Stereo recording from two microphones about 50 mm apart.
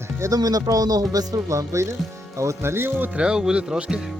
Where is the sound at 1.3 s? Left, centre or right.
Right.